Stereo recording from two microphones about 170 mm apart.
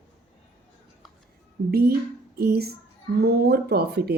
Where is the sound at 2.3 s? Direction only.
70° right (ahead or behind).